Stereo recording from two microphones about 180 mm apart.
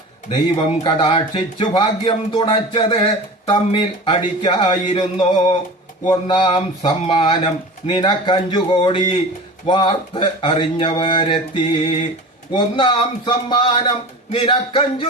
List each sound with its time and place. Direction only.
0.3 s speech: 30° left (ahead or behind)